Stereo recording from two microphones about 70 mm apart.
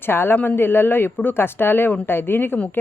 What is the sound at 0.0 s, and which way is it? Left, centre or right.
Speech, left.